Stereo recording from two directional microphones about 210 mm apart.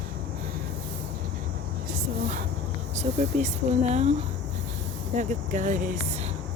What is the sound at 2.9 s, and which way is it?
Speech, 30° right (ahead or behind).